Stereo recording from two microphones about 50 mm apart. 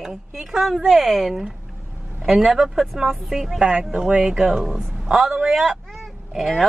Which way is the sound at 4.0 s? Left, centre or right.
Centre.